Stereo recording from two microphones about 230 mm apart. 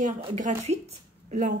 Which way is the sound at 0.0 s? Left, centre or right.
Right.